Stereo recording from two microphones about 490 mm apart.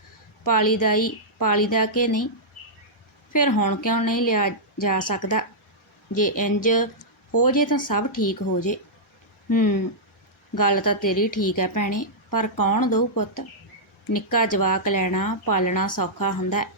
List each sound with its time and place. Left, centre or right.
0.4 s a woman's voice: left
3.3 s a woman's voice: left
9.5 s a woman's voice: left